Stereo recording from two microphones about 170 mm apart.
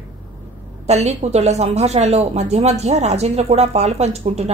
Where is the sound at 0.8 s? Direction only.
40° right (ahead or behind).